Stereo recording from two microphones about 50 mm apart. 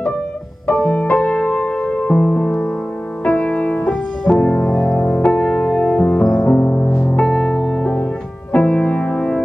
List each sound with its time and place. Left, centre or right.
0.7 s music: centre
7.0 s music: centre
8.5 s music: left